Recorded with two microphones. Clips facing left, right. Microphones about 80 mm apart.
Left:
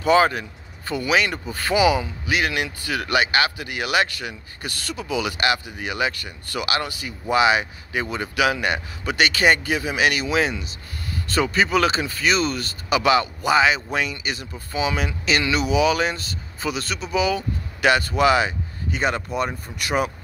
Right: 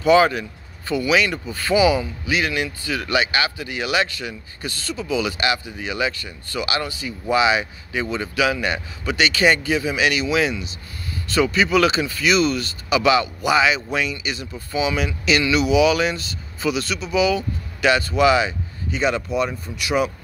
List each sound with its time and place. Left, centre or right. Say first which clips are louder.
0.0 s speech: right 2 dB; left